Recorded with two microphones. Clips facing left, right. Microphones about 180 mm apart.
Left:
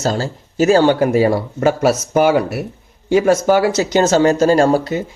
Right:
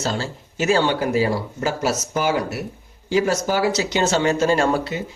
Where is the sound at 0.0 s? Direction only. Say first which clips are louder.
Left 6 dB; 40° left (ahead or behind).